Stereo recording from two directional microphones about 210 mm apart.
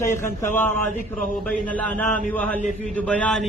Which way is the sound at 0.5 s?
10° left (ahead or behind).